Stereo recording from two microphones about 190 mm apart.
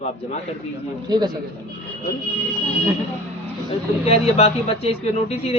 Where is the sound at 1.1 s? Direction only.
20° right (ahead or behind).